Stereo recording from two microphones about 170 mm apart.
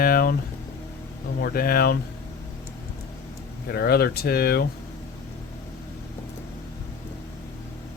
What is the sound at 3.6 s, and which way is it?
Speech, 65° left (ahead or behind).